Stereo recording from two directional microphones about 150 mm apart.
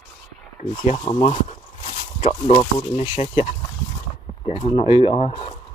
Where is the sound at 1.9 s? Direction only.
45° left (ahead or behind).